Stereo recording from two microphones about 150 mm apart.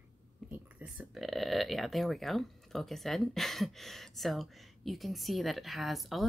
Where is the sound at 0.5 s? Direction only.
5° right (ahead or behind).